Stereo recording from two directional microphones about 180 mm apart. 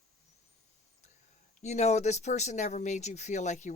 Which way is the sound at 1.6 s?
40° left (ahead or behind).